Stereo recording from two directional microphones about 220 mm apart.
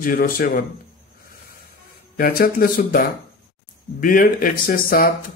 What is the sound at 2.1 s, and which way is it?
Speech, 40° left (ahead or behind).